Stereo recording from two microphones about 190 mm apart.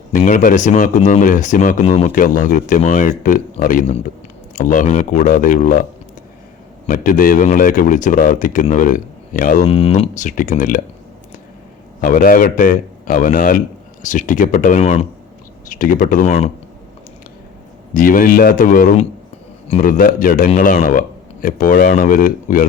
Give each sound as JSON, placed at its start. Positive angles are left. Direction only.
{"t": 0.1, "sound": "speech", "side_deg": 45}
{"t": 2.1, "sound": "speech", "side_deg": 45}
{"t": 6.8, "sound": "speech", "side_deg": 45}
{"t": 11.9, "sound": "speech", "side_deg": 45}
{"t": 15.7, "sound": "speech", "side_deg": 45}
{"t": 17.9, "sound": "speech", "side_deg": 45}